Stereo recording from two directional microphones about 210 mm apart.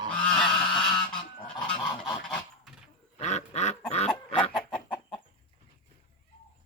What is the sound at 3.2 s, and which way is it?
Duck, 35° left (ahead or behind).